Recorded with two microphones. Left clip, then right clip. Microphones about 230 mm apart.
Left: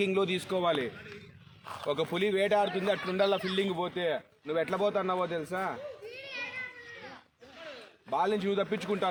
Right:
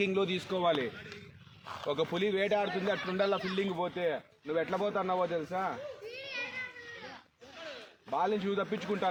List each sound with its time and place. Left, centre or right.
0.0 s speech: left
6.1 s a sound: centre
8.1 s speech: left